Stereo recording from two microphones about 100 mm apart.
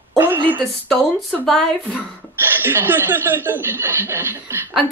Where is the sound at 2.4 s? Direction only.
20° right (ahead or behind).